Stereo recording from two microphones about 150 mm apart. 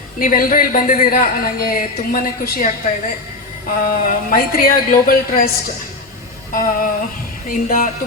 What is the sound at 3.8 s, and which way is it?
Speech, 70° left (ahead or behind).